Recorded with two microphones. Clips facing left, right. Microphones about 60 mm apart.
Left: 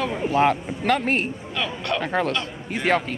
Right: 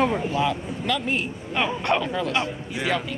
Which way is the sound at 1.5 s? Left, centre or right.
Right.